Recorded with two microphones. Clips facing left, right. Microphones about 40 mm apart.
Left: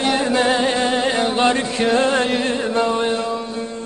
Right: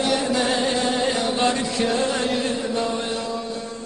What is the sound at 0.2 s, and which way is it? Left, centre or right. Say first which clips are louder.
Music: left 4 dB; left.